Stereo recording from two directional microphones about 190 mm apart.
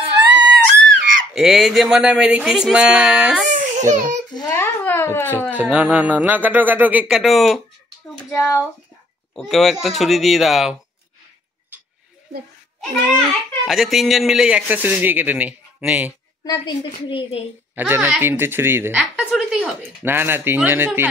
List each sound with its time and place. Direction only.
0.0 s a sound: 70° right (ahead or behind)
1.3 s speech: centre (ahead or behind)
3.5 s a sound: 40° right (ahead or behind)
4.3 s a woman's voice: 20° left (ahead or behind)
4.8 s a sound: 10° left (ahead or behind)
5.5 s speech: 10° right (ahead or behind)
8.3 s speech: 15° left (ahead or behind)
9.3 s speech: centre (ahead or behind)
13.7 s speech: centre (ahead or behind)
16.4 s a woman's voice: 25° left (ahead or behind)
17.7 s speech: 10° right (ahead or behind)